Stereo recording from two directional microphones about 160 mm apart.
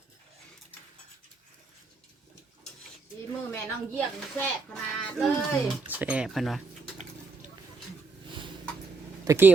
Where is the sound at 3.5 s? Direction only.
10° left (ahead or behind).